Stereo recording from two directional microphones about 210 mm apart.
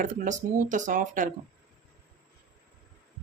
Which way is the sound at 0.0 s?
35° right (ahead or behind).